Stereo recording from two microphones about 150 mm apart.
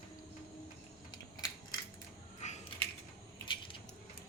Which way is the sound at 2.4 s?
50° left (ahead or behind).